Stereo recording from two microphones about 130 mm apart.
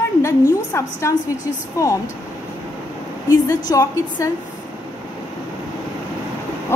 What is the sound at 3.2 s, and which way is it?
A woman's voice, 30° left (ahead or behind).